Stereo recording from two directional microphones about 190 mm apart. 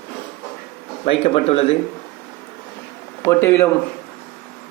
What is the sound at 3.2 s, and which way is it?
Speech, 15° left (ahead or behind).